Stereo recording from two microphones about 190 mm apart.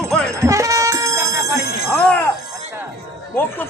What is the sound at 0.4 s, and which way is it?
Music, 15° right (ahead or behind).